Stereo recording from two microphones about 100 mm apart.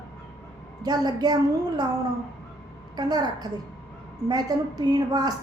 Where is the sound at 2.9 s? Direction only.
40° right (ahead or behind).